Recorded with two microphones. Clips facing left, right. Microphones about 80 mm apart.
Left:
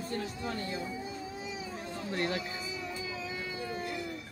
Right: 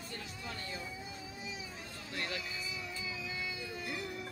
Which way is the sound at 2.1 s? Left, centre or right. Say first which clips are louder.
Left 8 dB; left.